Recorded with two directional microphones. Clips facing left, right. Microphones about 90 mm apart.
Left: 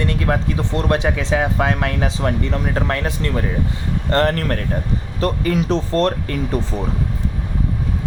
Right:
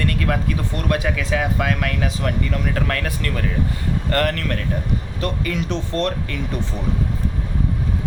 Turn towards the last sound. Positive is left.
turn(degrees=35)  # may be behind; listen again after turning